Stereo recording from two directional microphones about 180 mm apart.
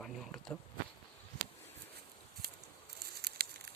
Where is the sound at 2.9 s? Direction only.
60° right (ahead or behind).